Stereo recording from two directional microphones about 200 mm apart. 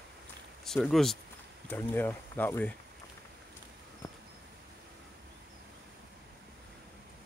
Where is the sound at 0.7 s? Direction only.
Centre (ahead or behind).